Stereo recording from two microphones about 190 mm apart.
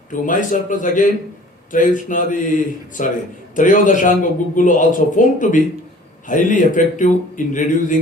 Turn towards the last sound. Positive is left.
turn(degrees=40)  # may be behind; listen again after turning